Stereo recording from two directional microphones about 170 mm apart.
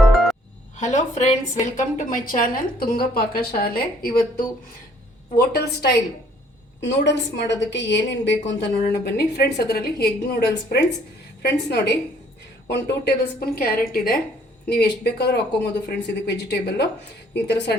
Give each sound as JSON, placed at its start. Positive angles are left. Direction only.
{"t": 0.8, "sound": "a woman's voice", "side_deg": 45}
{"t": 5.4, "sound": "a woman's voice", "side_deg": 65}
{"t": 6.8, "sound": "a woman's voice", "side_deg": 90}
{"t": 14.7, "sound": "speech", "side_deg": 75}